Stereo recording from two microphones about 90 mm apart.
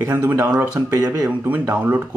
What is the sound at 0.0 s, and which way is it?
Speech, 25° right (ahead or behind).